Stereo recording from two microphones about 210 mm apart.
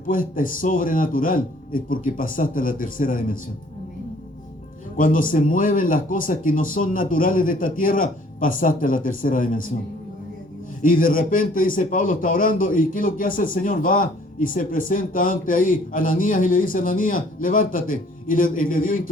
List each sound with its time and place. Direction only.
0.1 s a man's voice: 40° left (ahead or behind)
4.9 s a man's voice: 40° left (ahead or behind)
10.8 s a man's voice: 40° left (ahead or behind)